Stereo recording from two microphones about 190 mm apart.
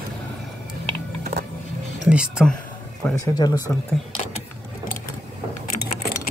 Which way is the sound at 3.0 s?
10° left (ahead or behind).